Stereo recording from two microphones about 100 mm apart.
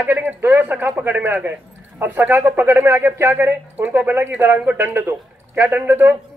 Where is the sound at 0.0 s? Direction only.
20° right (ahead or behind).